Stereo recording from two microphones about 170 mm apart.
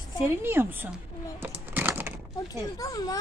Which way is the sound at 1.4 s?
10° right (ahead or behind).